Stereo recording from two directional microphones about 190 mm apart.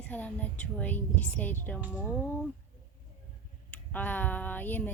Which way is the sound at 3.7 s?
10° left (ahead or behind).